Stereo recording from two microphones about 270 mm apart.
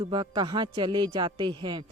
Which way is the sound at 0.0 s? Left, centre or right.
Centre.